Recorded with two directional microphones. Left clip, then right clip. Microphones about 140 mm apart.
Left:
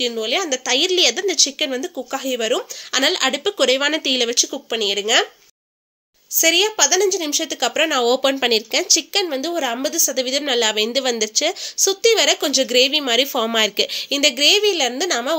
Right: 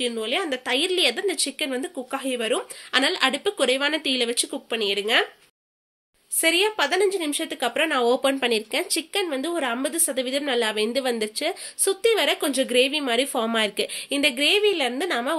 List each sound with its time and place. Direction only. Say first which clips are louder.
0.0 s speech: left 5 dB; 40° left (ahead or behind)
6.4 s speech: left 5 dB; 45° left (ahead or behind)